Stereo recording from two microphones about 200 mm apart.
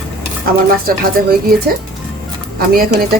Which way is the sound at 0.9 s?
45° right (ahead or behind).